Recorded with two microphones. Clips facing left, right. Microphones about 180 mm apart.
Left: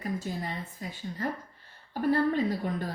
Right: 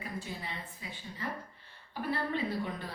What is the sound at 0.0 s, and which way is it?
A woman's voice, 45° left (ahead or behind).